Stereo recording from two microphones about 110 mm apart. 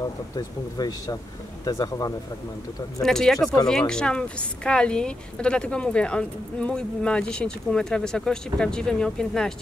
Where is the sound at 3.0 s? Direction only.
5° left (ahead or behind).